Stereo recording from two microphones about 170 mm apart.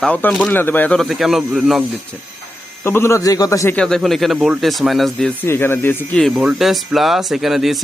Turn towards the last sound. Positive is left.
turn(degrees=0)  # may be behind; listen again after turning